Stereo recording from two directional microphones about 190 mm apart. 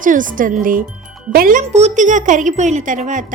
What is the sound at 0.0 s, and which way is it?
Speech, 45° right (ahead or behind).